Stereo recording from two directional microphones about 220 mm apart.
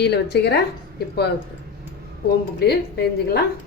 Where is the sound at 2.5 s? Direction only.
45° left (ahead or behind).